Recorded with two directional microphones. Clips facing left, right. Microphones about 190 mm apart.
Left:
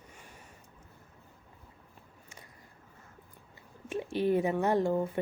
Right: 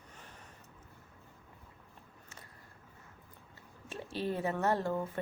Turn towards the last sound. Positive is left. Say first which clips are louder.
# left 4 dB
turn(degrees=15)  # may be behind; listen again after turning